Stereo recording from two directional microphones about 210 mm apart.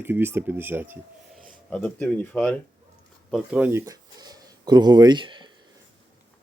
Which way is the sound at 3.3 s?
5° right (ahead or behind).